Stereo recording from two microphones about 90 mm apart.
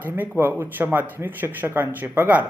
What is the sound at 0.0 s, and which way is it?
Speech, 20° right (ahead or behind).